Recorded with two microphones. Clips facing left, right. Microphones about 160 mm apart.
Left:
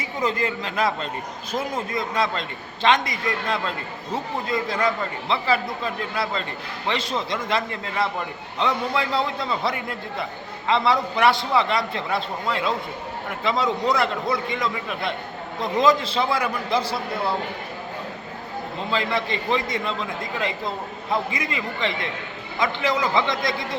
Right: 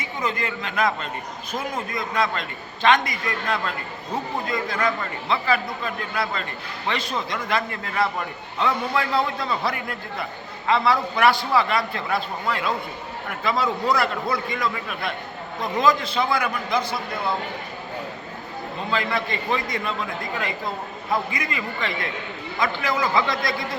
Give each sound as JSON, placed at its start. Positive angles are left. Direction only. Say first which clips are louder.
{"t": 0.2, "sound": "a man's voice", "louder": "left 3 dB", "side_deg": 30}
{"t": 18.9, "sound": "a man's voice", "louder": "left 1 dB", "side_deg": 25}
{"t": 21.1, "sound": "a man's voice", "louder": "even", "side_deg": 25}